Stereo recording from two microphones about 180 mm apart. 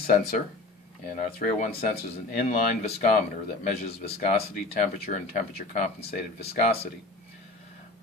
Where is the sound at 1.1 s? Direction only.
50° left (ahead or behind).